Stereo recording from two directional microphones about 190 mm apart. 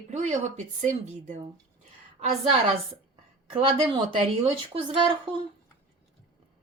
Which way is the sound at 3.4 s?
25° right (ahead or behind).